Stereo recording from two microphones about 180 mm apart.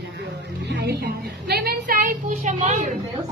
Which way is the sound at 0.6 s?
65° right (ahead or behind).